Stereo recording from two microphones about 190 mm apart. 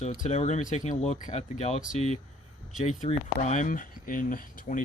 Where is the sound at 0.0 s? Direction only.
40° left (ahead or behind).